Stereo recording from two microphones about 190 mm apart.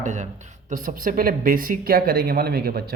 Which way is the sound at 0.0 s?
40° right (ahead or behind).